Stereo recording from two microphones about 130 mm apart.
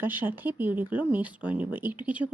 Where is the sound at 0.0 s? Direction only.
15° right (ahead or behind).